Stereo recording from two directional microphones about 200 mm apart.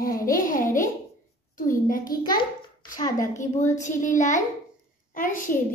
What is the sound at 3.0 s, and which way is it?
Speech, 15° left (ahead or behind).